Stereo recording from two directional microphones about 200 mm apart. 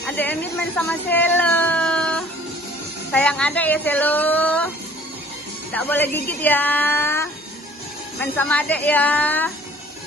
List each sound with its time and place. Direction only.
0.0 s speech: 10° left (ahead or behind)
5.7 s speech: 10° left (ahead or behind)